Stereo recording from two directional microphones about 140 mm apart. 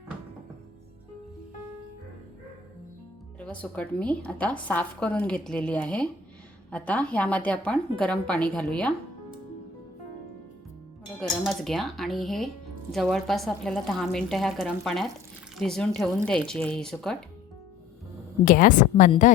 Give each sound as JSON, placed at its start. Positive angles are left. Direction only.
{"t": 3.4, "sound": "a woman's voice", "side_deg": 10}
{"t": 11.2, "sound": "a woman's voice", "side_deg": 0}
{"t": 18.4, "sound": "a woman's voice", "side_deg": 75}